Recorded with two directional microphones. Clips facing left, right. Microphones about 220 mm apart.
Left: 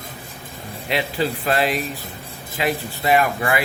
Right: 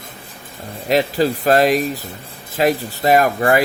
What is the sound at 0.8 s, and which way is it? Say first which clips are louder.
Speech: right 6 dB; 40° right (ahead or behind).